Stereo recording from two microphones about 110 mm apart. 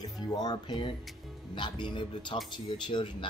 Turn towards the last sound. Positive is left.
turn(degrees=45)  # may be behind; listen again after turning